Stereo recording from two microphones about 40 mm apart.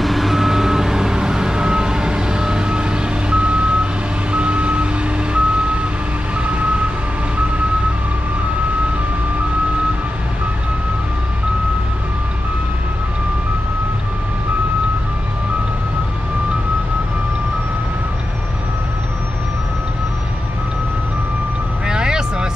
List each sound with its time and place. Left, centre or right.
0.0 s reversing beeps: centre; by 6.9 s right
21.8 s vehicle: right